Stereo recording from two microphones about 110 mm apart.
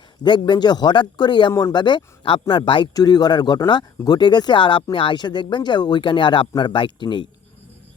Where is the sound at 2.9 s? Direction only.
35° left (ahead or behind).